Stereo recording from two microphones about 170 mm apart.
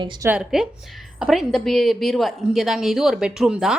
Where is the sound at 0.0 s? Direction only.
25° right (ahead or behind).